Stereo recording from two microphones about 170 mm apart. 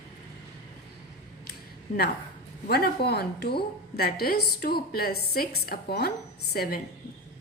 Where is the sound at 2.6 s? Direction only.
65° left (ahead or behind).